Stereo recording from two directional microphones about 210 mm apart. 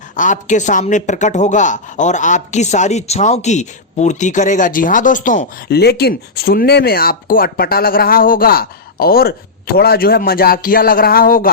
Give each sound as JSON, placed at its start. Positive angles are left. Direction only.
{"t": 0.2, "sound": "speech", "side_deg": 35}